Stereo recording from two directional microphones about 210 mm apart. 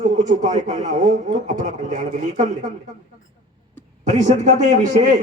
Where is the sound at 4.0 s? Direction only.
35° right (ahead or behind).